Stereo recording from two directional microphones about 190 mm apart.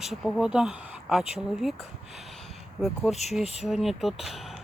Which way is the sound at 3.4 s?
35° left (ahead or behind).